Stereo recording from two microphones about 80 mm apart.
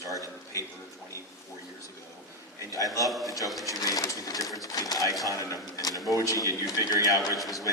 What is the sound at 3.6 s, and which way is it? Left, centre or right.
Speech, left.